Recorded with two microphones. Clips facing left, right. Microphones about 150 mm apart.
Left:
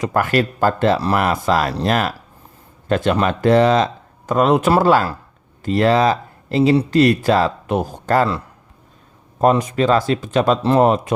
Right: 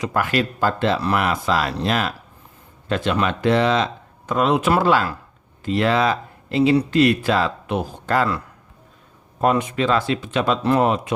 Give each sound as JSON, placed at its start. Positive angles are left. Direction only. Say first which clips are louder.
{"t": 0.0, "sound": "speech", "louder": "left 4 dB", "side_deg": 45}
{"t": 9.4, "sound": "speech", "louder": "left 4 dB", "side_deg": 40}